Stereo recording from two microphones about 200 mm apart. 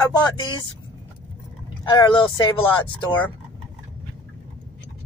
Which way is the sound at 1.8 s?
20° left (ahead or behind).